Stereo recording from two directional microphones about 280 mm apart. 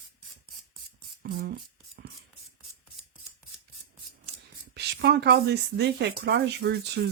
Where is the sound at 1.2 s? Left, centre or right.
Right.